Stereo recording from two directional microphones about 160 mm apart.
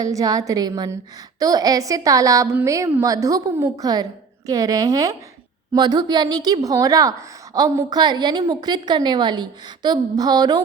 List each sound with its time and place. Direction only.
0.0 s a woman's voice: 20° right (ahead or behind)